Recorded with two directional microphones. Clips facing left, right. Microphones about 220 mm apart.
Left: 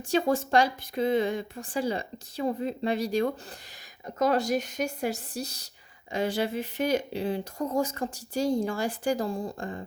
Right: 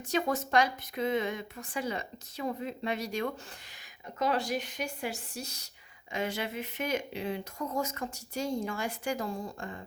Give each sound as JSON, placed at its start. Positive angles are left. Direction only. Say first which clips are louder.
{"t": 0.1, "sound": "a woman's voice", "louder": "left 5 dB", "side_deg": 30}